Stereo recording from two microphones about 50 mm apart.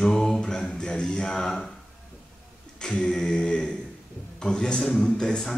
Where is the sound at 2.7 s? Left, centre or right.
Centre.